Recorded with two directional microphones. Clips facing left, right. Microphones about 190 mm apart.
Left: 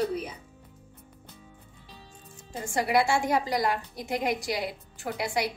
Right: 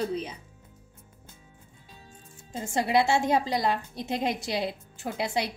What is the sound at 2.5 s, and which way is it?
A woman's voice, 20° right (ahead or behind).